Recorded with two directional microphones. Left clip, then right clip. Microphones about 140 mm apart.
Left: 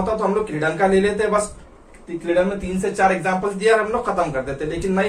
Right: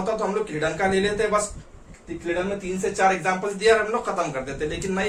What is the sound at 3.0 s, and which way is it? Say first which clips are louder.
A man's voice: left 3 dB; 15° right (ahead or behind).